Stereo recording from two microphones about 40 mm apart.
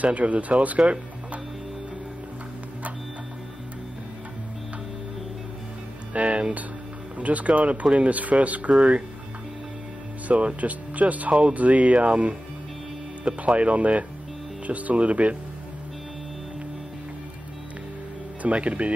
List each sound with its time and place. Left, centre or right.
0.0 s speech: right
6.1 s speech: right
10.2 s speech: right
13.4 s speech: right
18.4 s speech: right